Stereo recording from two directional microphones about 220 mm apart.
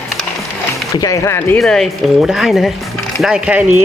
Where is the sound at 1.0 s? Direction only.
15° left (ahead or behind).